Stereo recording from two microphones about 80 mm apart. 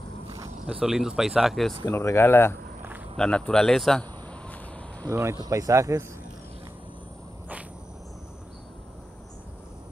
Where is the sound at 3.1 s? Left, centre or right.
Centre.